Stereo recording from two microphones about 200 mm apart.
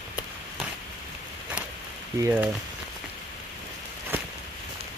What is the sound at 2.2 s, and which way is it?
Speech, 10° right (ahead or behind).